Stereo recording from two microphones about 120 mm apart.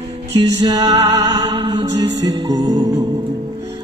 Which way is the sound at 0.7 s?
35° right (ahead or behind).